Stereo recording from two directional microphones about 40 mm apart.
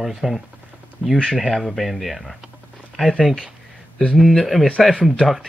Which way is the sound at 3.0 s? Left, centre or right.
Centre.